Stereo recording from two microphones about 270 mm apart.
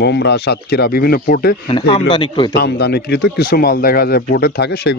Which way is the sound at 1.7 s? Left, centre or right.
Centre.